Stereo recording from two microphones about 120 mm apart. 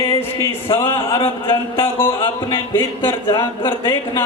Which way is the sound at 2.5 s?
20° left (ahead or behind).